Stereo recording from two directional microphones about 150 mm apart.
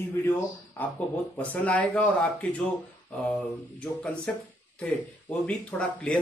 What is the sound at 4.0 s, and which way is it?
Speech, 10° left (ahead or behind).